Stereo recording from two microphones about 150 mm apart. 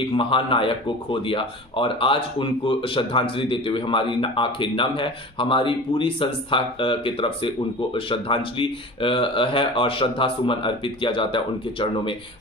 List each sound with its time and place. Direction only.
0.0 s speech: 35° left (ahead or behind)